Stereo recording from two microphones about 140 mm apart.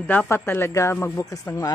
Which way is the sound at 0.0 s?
10° left (ahead or behind).